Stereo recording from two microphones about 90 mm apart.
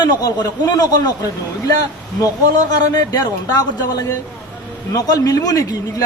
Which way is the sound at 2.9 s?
45° left (ahead or behind).